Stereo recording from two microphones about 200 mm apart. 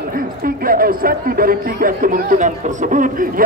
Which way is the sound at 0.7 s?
45° right (ahead or behind).